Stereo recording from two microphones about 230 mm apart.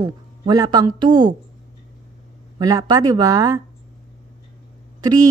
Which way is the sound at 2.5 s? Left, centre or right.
Centre.